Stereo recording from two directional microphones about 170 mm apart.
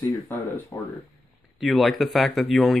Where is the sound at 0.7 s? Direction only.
15° left (ahead or behind).